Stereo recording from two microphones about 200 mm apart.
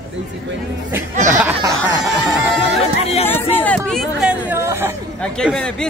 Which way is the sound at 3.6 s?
5° left (ahead or behind).